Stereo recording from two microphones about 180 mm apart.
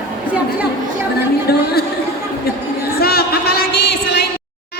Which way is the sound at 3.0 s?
60° left (ahead or behind).